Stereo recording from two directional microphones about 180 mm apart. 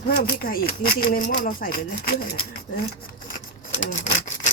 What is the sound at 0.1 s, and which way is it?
Speech, 50° left (ahead or behind).